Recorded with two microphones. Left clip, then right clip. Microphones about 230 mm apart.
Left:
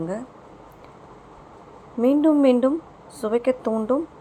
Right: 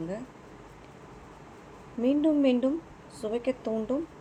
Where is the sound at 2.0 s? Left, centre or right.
Centre.